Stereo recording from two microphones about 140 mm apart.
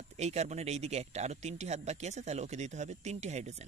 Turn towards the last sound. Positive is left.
turn(degrees=-55)  # may be behind; listen again after turning